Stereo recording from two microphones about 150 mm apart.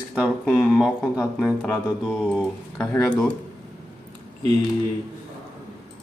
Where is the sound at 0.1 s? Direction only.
5° right (ahead or behind).